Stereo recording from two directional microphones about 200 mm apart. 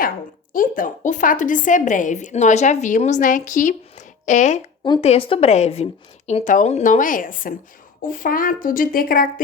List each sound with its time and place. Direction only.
0.5 s a woman's voice: 40° left (ahead or behind)